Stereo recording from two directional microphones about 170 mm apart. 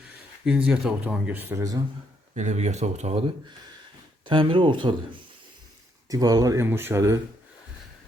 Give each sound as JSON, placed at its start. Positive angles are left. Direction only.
{"t": 0.4, "sound": "speech", "side_deg": -5}
{"t": 2.3, "sound": "speech", "side_deg": -45}
{"t": 4.3, "sound": "speech", "side_deg": -30}
{"t": 6.1, "sound": "speech", "side_deg": -20}